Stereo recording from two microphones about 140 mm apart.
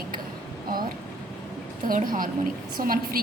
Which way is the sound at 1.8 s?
80° right.